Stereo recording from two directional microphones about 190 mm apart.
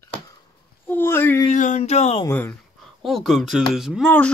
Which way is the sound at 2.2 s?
10° left (ahead or behind).